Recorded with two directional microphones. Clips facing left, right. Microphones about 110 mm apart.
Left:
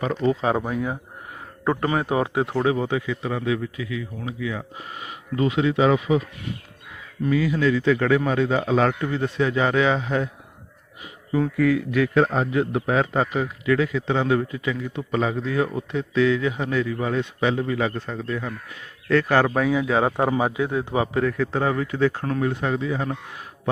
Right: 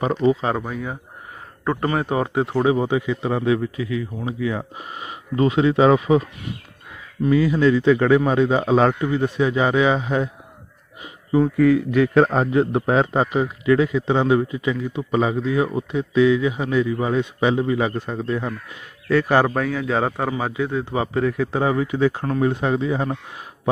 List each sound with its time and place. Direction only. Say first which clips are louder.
0.0 s a man's voice: right 4 dB; 15° right (ahead or behind)
0.4 s a man's voice: left 1 dB; 5° left (ahead or behind)
2.6 s a man's voice: right 4 dB; 15° right (ahead or behind); by 4.6 s 35° right (ahead or behind)
4.8 s speech: right 2 dB; 25° right (ahead or behind)
7.3 s a man's voice: right 4 dB; 30° right (ahead or behind)
9.0 s a man's voice: right 3 dB; 15° right (ahead or behind)
11.0 s a sound: right 5 dB; 25° right (ahead or behind)
11.5 s a man's voice: right 3 dB; 30° right (ahead or behind)
19.5 s a man's voice: left 1 dB; 5° left (ahead or behind)
21.2 s a man's voice: right 2 dB; 10° right (ahead or behind)